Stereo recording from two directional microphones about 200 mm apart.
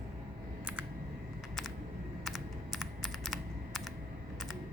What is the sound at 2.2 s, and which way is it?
Computer keyboard, centre (ahead or behind).